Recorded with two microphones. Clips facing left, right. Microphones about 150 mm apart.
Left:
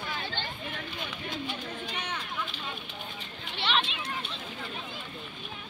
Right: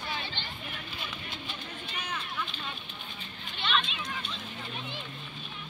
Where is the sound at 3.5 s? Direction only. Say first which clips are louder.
Left 1 dB; 70° left (ahead or behind).